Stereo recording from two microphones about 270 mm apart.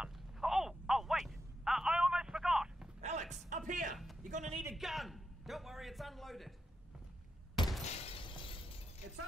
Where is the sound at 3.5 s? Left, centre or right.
Right.